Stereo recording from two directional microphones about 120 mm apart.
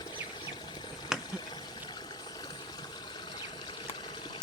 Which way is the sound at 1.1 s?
5° right (ahead or behind).